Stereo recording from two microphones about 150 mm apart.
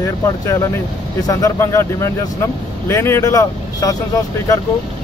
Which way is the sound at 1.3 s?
20° left (ahead or behind).